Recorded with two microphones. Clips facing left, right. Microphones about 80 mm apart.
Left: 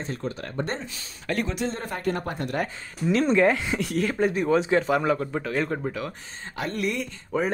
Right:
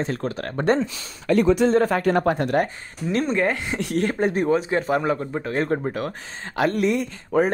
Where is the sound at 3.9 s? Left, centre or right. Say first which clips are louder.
Right 3 dB; right.